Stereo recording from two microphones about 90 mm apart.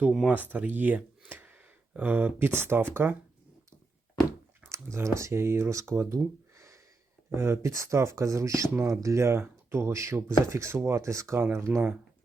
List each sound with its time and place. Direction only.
0.3 s speech: 20° right (ahead or behind)
4.6 s speech: 30° right (ahead or behind)
7.3 s speech: 30° right (ahead or behind)